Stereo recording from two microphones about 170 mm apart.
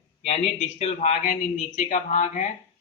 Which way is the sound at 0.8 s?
45° left (ahead or behind).